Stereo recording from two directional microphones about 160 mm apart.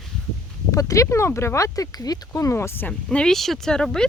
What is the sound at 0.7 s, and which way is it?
Speech, 20° left (ahead or behind).